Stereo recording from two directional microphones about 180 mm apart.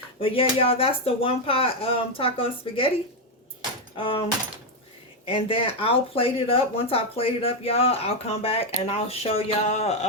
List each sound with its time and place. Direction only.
0.2 s speech: 30° left (ahead or behind)
3.9 s speech: 30° left (ahead or behind)
5.2 s speech: 30° left (ahead or behind)